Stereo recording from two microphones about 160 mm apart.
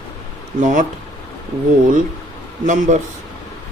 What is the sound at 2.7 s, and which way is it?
Speech, 50° right (ahead or behind).